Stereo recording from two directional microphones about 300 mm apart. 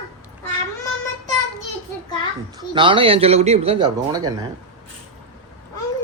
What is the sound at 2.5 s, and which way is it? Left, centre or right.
Speech, centre.